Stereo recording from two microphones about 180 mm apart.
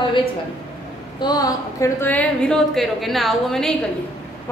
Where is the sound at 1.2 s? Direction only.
20° left (ahead or behind); by 3.7 s centre (ahead or behind).